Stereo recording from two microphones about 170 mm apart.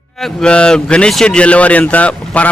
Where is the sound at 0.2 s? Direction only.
Centre (ahead or behind).